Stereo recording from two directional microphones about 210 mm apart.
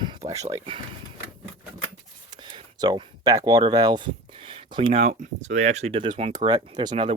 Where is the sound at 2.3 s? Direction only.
20° right (ahead or behind).